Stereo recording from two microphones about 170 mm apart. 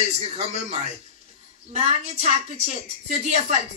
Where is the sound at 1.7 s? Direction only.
40° right (ahead or behind).